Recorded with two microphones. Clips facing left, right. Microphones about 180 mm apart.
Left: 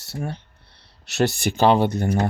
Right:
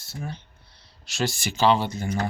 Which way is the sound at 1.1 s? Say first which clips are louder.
Left 7 dB; 65° left (ahead or behind).